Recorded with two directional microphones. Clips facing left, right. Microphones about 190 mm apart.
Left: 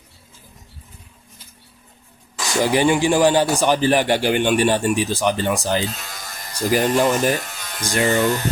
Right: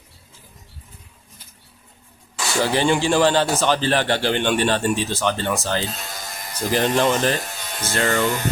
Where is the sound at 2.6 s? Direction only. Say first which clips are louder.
Left 3 dB; 15° left (ahead or behind).